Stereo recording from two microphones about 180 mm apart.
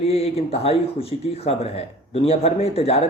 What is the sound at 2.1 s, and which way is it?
Speech, 35° left (ahead or behind).